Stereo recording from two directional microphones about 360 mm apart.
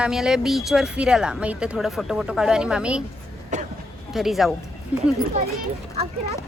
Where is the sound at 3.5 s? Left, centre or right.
Centre.